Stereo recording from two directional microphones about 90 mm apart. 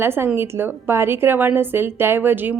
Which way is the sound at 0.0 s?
25° right (ahead or behind).